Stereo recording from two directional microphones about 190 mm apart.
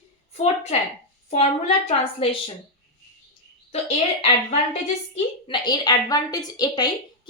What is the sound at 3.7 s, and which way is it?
Speech, 35° left (ahead or behind).